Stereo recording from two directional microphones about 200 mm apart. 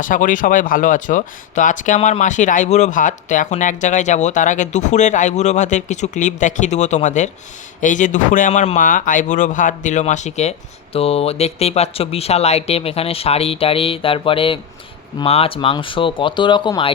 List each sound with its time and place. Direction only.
0.0 s speech: 40° left (ahead or behind); by 16.9 s 20° left (ahead or behind)